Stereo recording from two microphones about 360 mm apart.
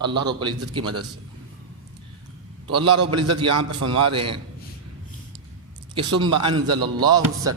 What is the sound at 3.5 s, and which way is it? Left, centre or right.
Speech, right.